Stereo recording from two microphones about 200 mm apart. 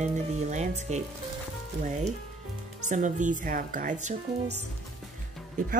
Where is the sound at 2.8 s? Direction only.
40° right (ahead or behind).